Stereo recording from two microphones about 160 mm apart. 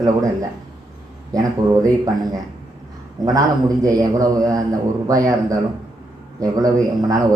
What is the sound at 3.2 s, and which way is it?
A man's voice, 25° right (ahead or behind).